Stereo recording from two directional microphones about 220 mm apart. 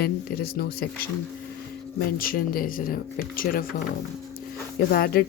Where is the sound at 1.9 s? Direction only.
40° left (ahead or behind).